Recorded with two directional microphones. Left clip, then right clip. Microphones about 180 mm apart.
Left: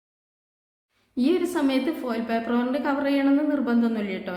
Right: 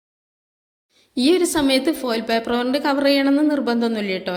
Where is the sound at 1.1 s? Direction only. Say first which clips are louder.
Right 6 dB; 35° right (ahead or behind).